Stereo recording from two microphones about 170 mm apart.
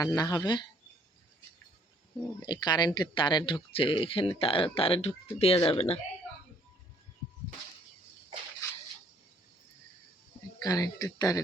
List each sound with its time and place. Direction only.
0.0 s speech: 20° left (ahead or behind)
2.4 s speech: 25° left (ahead or behind)
10.6 s speech: 20° left (ahead or behind)